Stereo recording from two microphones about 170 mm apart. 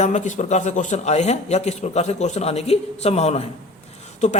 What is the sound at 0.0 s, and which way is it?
Speech, 45° left (ahead or behind).